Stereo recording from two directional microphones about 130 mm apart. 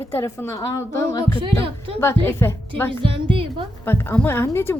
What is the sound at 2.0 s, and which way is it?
Speech, 20° left (ahead or behind).